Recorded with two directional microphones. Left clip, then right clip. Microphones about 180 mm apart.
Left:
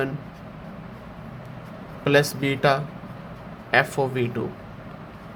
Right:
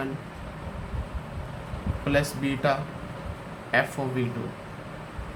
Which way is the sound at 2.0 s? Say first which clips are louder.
Left 6 dB; 55° left (ahead or behind).